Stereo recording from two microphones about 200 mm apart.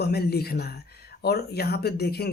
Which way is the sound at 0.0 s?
55° left (ahead or behind).